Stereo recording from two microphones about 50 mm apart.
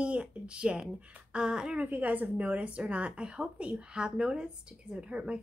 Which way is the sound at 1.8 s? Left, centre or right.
Right.